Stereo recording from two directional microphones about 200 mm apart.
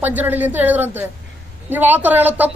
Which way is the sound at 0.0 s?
10° right (ahead or behind).